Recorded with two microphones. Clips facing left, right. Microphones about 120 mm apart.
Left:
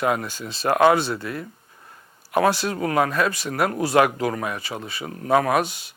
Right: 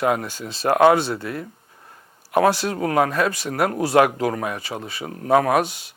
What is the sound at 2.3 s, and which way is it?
Speech, 55° right (ahead or behind).